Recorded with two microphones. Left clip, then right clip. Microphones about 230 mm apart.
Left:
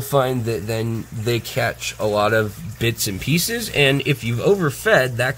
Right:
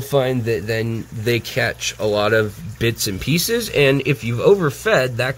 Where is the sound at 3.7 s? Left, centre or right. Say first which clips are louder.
Right 1 dB; right.